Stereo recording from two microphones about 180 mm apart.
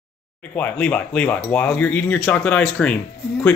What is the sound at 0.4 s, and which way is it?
Speech, 10° left (ahead or behind).